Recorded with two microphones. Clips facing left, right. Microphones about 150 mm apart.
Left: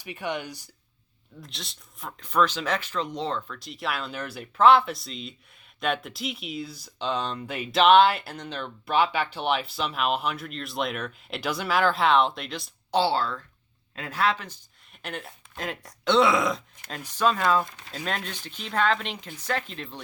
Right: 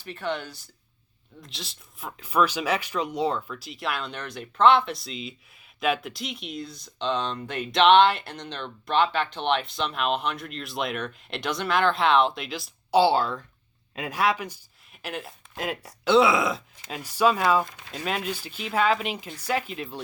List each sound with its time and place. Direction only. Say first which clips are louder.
0.0 s speech: right 1 dB; 15° left (ahead or behind)
1.4 s speech: right 1 dB; centre (ahead or behind)
13.0 s speech: right 4 dB; 15° right (ahead or behind)